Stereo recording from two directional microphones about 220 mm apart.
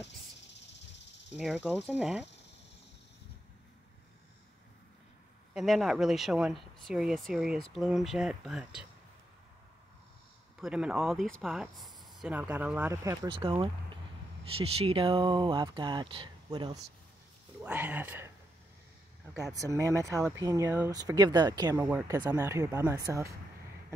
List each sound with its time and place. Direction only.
1.3 s speech: centre (ahead or behind)
5.5 s speech: centre (ahead or behind)
10.6 s speech: 5° right (ahead or behind); by 16.8 s 20° right (ahead or behind)
17.6 s speech: 5° right (ahead or behind)
19.4 s speech: 15° right (ahead or behind)